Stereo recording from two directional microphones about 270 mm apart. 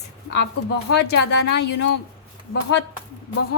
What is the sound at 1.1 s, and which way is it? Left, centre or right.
Speech, left.